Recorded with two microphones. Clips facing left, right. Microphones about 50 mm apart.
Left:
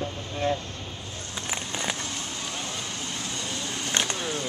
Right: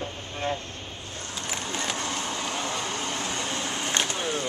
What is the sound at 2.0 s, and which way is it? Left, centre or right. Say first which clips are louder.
Vehicle: right 4 dB; right.